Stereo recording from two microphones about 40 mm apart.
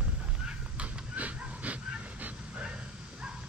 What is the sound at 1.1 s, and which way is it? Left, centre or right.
Dog, right.